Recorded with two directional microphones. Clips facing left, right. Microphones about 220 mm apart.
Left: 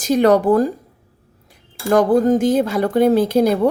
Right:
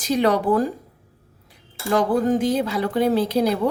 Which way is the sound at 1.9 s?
45° left (ahead or behind).